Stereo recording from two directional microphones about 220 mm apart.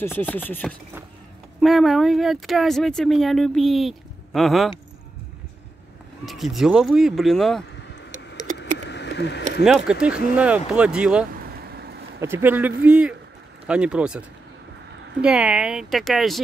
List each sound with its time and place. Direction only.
0.0 s speech: 10° left (ahead or behind)
6.2 s speech: centre (ahead or behind)
8.5 s a sound: 50° left (ahead or behind)
9.7 s speech: 5° right (ahead or behind)
11.3 s a sound: 45° right (ahead or behind)
12.2 s speech: 10° right (ahead or behind)
15.2 s speech: 5° right (ahead or behind)